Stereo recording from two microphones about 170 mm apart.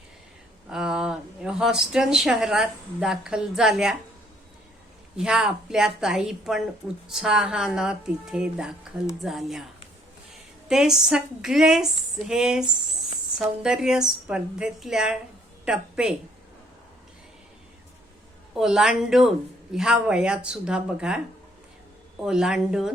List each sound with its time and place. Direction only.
0.7 s speech: 5° right (ahead or behind)
5.1 s a woman's voice: 5° right (ahead or behind)
10.7 s a woman's voice: 5° right (ahead or behind)
18.5 s a woman's voice: 5° right (ahead or behind)
22.2 s a woman's voice: 5° right (ahead or behind)